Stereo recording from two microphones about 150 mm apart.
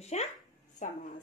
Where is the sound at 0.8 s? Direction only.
55° left (ahead or behind).